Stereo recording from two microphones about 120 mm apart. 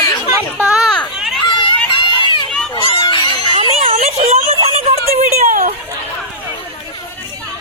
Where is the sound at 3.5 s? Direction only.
55° right (ahead or behind).